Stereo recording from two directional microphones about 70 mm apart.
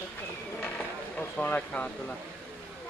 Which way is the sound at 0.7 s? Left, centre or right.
Left.